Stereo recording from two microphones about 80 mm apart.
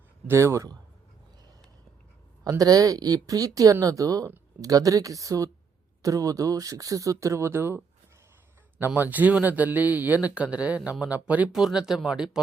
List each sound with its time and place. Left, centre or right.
0.3 s a man's voice: right
2.5 s speech: right
8.9 s speech: right
11.5 s speech: centre